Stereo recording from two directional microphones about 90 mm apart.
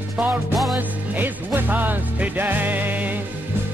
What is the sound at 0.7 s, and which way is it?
Music, 20° right (ahead or behind).